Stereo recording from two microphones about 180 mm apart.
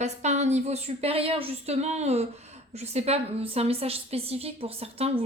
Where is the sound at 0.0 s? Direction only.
40° right (ahead or behind).